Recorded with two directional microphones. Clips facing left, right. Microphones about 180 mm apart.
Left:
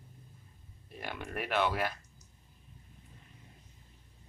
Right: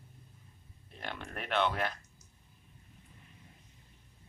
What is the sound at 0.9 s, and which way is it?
Speech, 10° left (ahead or behind).